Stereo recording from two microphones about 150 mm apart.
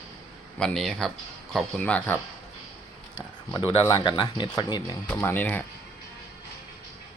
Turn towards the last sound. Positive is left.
turn(degrees=15)  # may be behind; listen again after turning